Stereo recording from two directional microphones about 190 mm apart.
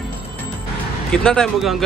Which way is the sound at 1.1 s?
5° left (ahead or behind).